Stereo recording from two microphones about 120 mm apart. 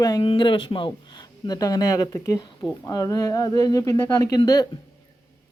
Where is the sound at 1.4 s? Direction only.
30° left (ahead or behind).